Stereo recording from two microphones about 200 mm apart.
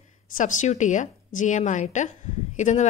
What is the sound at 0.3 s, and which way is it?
A woman's voice, 40° left (ahead or behind).